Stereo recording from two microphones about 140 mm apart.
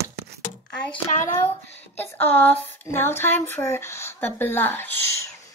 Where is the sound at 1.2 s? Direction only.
15° left (ahead or behind).